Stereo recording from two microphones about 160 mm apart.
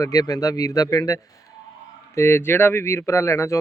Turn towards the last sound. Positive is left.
turn(degrees=15)  # may be behind; listen again after turning